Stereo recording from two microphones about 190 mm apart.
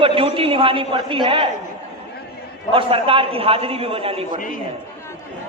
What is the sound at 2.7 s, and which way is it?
A man's voice, 30° right (ahead or behind).